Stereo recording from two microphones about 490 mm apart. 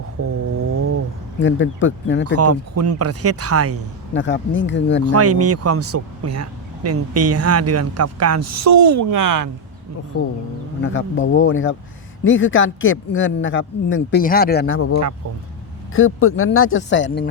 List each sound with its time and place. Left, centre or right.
0.5 s a sound: right
1.4 s speech: left
2.2 s speech: right
4.1 s speech: left
5.0 s speech: right
10.1 s speech: left